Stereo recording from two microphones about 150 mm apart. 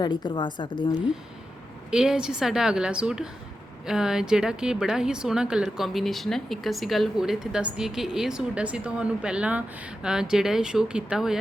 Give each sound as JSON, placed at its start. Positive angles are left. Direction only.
{"t": 0.0, "sound": "a woman's voice", "side_deg": 30}
{"t": 1.9, "sound": "a woman's voice", "side_deg": -5}